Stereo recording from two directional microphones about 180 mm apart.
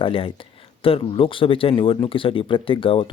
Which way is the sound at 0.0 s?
30° left (ahead or behind).